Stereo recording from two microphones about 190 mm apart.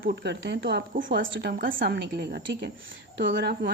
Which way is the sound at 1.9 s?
60° right (ahead or behind).